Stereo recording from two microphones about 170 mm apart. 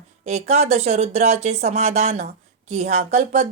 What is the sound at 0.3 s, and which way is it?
Speech, 40° right (ahead or behind).